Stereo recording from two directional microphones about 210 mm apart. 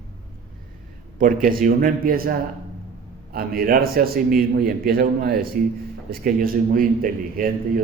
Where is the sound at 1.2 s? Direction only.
40° right (ahead or behind).